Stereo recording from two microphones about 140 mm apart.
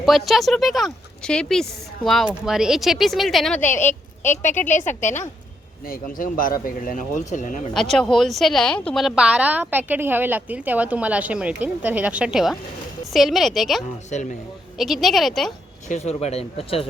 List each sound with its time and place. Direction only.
0.0 s speech: centre (ahead or behind)
3.6 s a woman's voice: 15° left (ahead or behind)
4.3 s speech: 55° left (ahead or behind)
5.8 s speech: 90° left; by 7.7 s 60° left (ahead or behind)
7.7 s a woman's voice: 5° left (ahead or behind)
14.1 s speech: 60° left (ahead or behind)
14.8 s speech: centre (ahead or behind)
15.9 s speech: 50° left (ahead or behind)